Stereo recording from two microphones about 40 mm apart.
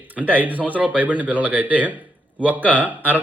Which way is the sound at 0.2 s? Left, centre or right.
Right.